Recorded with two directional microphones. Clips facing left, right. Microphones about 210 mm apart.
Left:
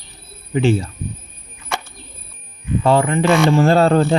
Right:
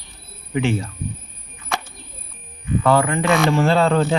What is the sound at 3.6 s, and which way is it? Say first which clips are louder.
Speech: left 3 dB; 40° left (ahead or behind).